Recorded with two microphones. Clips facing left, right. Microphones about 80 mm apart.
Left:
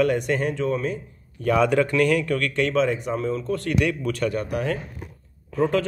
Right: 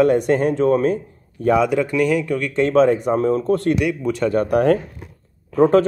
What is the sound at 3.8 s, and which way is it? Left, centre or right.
Speech, centre.